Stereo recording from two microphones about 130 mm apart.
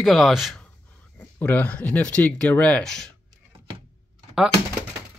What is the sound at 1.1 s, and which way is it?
Speech, 15° left (ahead or behind).